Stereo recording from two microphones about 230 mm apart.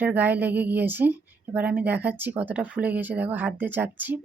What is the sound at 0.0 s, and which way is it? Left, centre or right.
Speech, centre.